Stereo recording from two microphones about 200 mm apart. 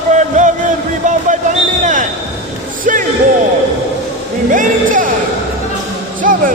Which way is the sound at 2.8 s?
40° right (ahead or behind).